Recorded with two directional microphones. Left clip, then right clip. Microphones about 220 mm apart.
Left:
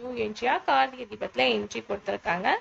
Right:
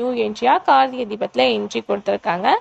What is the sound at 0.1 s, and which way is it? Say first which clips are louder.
Speech: right 8 dB; 30° right (ahead or behind).